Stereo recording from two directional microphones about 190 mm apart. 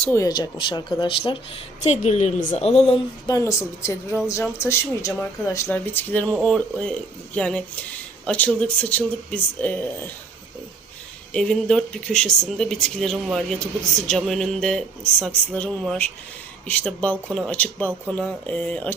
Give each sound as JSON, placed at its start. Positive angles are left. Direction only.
{"t": 0.0, "sound": "a woman's voice", "side_deg": 15}
{"t": 11.3, "sound": "speech", "side_deg": 5}